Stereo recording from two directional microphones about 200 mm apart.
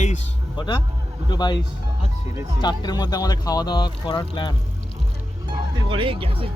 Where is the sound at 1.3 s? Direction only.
20° left (ahead or behind).